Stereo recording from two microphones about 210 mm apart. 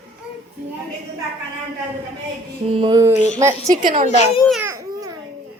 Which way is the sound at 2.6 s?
25° right (ahead or behind).